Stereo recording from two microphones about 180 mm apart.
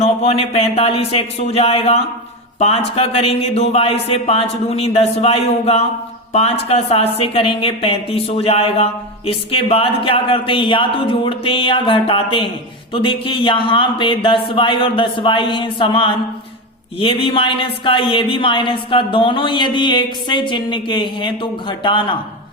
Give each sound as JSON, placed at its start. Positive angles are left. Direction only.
{"t": 0.0, "sound": "a woman's voice", "side_deg": 35}